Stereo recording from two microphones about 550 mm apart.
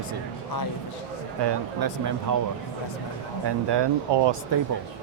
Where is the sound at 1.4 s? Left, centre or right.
Right.